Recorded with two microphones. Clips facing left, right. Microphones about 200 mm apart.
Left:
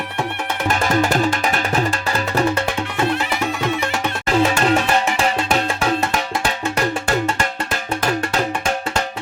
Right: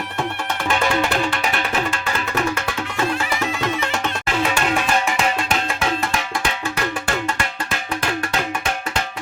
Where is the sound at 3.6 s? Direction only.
10° left (ahead or behind).